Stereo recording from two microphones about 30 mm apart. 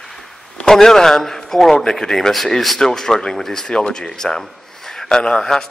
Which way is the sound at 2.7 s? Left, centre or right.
Centre.